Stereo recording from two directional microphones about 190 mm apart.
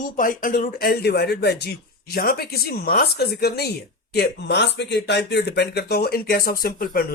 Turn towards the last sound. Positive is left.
turn(degrees=50)  # may be behind; listen again after turning